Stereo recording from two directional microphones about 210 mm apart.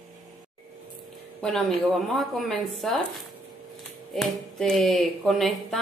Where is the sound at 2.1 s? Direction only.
Centre (ahead or behind).